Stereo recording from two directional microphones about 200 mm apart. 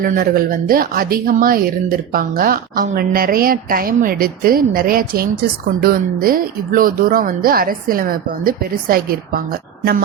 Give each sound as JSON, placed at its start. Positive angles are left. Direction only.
{"t": 0.0, "sound": "a woman's voice", "side_deg": -45}